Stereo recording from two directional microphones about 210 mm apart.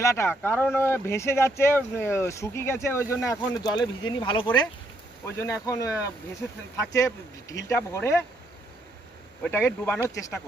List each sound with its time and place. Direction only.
0.0 s speech: 15° left (ahead or behind)
9.4 s speech: 10° left (ahead or behind)